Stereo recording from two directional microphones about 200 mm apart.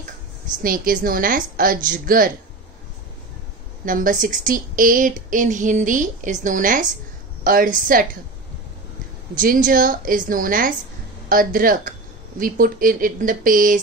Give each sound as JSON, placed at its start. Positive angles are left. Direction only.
{"t": 0.6, "sound": "a woman's voice", "side_deg": -45}
{"t": 3.8, "sound": "a woman's voice", "side_deg": -45}
{"t": 9.4, "sound": "a woman's voice", "side_deg": -45}